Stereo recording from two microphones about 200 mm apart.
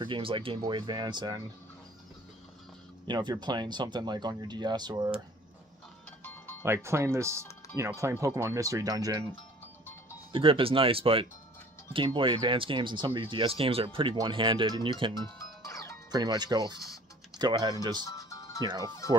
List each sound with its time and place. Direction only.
0.0 s speech: 25° right (ahead or behind)
3.1 s speech: 20° right (ahead or behind)
6.2 s music: 10° left (ahead or behind)
6.6 s speech: 15° right (ahead or behind)
10.3 s speech: 25° right (ahead or behind)
15.6 s music: 15° left (ahead or behind)
16.1 s speech: 20° right (ahead or behind)
18.0 s music: 15° left (ahead or behind)
18.8 s speech: 15° left (ahead or behind)